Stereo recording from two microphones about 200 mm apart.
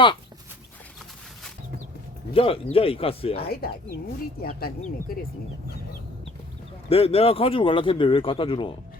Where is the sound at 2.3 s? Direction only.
30° left (ahead or behind).